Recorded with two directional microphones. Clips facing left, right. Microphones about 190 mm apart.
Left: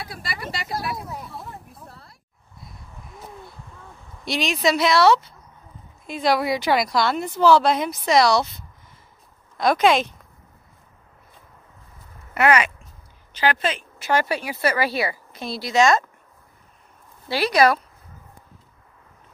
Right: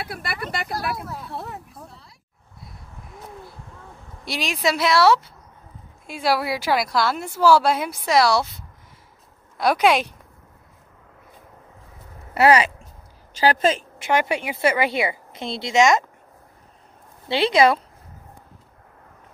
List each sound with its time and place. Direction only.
0.0 s speech: 60° right (ahead or behind)
1.3 s a sound: 70° right (ahead or behind)
4.2 s a woman's voice: 5° right (ahead or behind)
9.6 s speech: 10° right (ahead or behind)
12.4 s speech: 30° right (ahead or behind)
14.0 s a woman's voice: 20° right (ahead or behind)
17.3 s a woman's voice: 25° right (ahead or behind)